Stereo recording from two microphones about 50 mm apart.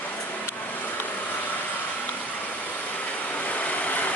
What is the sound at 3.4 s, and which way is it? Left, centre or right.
Vehicle, left.